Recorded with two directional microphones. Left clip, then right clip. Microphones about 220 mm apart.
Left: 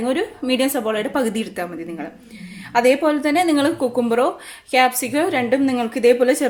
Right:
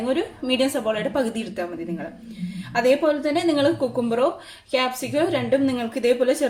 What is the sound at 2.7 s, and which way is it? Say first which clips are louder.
A woman's voice: left 3 dB; 40° left (ahead or behind).